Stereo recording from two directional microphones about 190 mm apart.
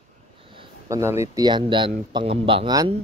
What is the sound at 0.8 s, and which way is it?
A man's voice, 15° right (ahead or behind).